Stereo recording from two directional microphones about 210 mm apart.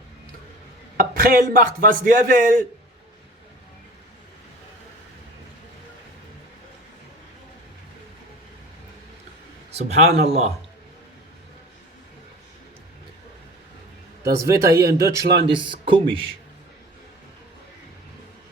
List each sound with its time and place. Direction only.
0.9 s a man's voice: 45° right (ahead or behind)
9.7 s a man's voice: 30° right (ahead or behind)
14.4 s speech: 15° right (ahead or behind)